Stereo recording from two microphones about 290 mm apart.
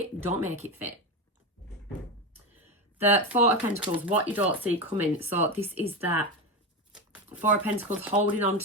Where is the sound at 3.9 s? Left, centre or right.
Centre.